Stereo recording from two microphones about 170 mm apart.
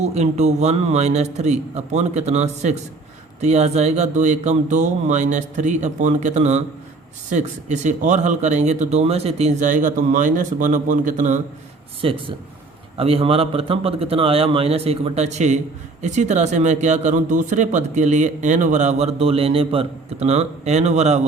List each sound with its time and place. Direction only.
0.0 s a man's voice: 40° right (ahead or behind)
12.0 s a man's voice: 30° right (ahead or behind)